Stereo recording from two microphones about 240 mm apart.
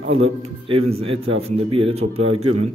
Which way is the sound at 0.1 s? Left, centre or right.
Right.